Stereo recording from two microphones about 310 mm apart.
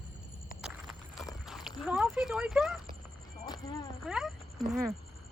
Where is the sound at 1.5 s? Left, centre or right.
Centre.